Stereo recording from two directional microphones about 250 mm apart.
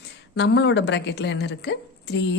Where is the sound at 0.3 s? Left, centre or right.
Left.